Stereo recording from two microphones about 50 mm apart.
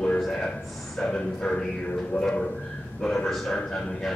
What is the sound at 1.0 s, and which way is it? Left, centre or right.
A man's voice, left.